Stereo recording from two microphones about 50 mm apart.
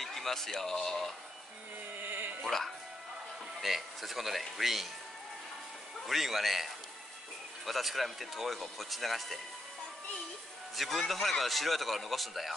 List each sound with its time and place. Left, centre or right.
0.0 s speech: centre
2.0 s music: right
3.6 s speech: centre
6.0 s speech: centre
10.8 s speech: centre